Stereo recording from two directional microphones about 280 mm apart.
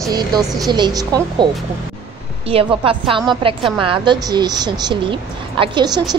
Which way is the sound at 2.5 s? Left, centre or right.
Centre.